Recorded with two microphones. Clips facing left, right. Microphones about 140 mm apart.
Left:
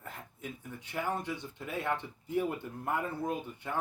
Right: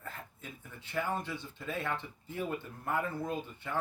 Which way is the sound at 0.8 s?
15° left (ahead or behind).